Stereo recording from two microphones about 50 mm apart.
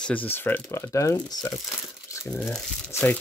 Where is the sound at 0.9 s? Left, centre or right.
Left.